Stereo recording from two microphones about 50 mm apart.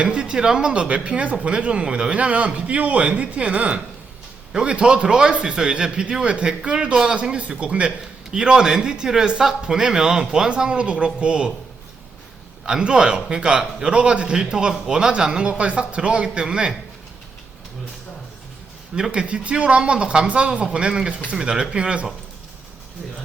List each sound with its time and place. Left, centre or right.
0.0 s a man's voice: right
12.6 s a man's voice: centre
18.9 s a man's voice: centre